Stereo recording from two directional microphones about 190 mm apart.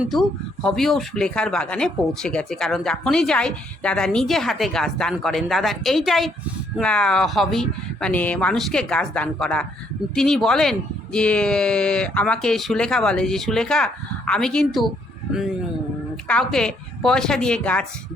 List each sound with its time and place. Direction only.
0.0 s speech: centre (ahead or behind)